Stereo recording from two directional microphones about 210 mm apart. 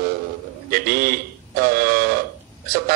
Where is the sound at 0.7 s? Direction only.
45° right (ahead or behind).